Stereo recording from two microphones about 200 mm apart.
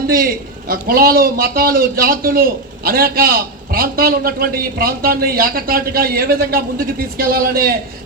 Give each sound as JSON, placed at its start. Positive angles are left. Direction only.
{"t": 0.1, "sound": "a man's voice", "side_deg": -45}